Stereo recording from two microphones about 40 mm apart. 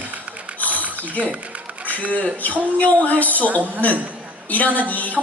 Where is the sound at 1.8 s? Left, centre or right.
Left.